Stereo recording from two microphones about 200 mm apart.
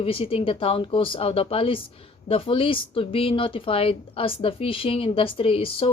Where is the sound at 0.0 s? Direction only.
25° left (ahead or behind).